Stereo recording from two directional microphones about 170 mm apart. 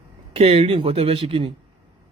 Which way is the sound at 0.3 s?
35° right (ahead or behind).